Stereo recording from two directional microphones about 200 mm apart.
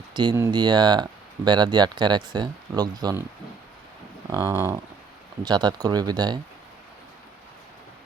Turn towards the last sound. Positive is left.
turn(degrees=-20)  # may be behind; listen again after turning